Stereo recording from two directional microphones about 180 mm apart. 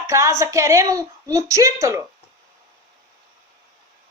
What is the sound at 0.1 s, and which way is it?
A woman's voice, 15° right (ahead or behind).